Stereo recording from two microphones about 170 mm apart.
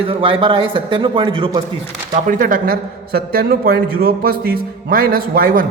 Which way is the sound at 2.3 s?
50° right (ahead or behind).